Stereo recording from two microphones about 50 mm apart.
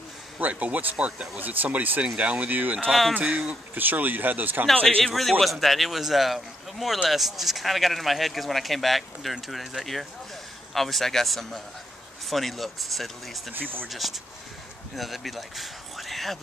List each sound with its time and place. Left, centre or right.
0.4 s speech: right
1.4 s speech: right
2.9 s speech: centre
3.3 s speech: centre
3.7 s speech: right
5.0 s speech: centre
13.5 s speech: right
13.8 s speech: centre